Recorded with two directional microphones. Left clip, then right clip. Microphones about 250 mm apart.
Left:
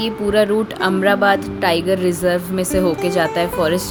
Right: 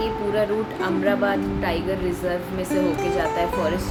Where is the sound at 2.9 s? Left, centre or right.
Centre.